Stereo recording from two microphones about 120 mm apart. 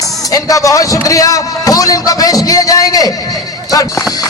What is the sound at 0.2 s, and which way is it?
A man's voice, 30° left (ahead or behind).